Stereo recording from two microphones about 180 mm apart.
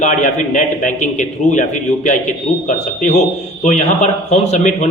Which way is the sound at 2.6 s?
45° left (ahead or behind).